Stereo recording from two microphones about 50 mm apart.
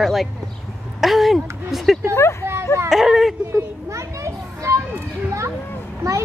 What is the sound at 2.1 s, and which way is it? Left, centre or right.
Speech, left.